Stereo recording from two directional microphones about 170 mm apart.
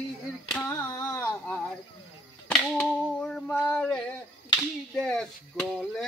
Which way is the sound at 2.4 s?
5° left (ahead or behind).